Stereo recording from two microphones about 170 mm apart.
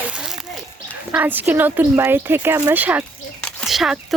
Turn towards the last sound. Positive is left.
turn(degrees=0)  # may be behind; listen again after turning